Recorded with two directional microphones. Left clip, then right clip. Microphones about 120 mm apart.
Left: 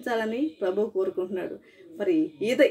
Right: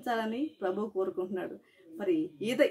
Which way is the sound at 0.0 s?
25° right (ahead or behind).